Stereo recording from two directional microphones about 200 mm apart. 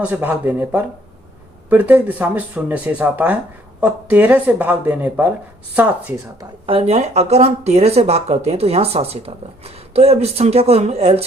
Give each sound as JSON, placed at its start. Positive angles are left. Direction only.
{"t": 0.0, "sound": "speech", "side_deg": -10}
{"t": 6.7, "sound": "speech", "side_deg": -30}